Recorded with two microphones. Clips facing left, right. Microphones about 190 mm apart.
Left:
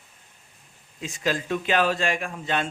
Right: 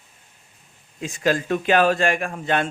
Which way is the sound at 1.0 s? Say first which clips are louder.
Right 5 dB; 50° right (ahead or behind).